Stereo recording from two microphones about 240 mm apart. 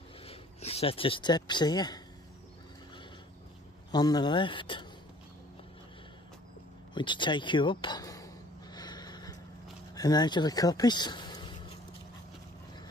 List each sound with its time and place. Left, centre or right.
0.2 s speech: left
3.9 s speech: centre
6.9 s speech: centre
8.7 s a sound: centre
9.9 s speech: centre